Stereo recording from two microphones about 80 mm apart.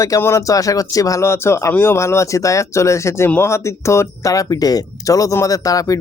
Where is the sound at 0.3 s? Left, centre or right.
Left.